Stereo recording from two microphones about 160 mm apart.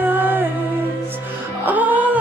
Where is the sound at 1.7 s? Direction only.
10° right (ahead or behind).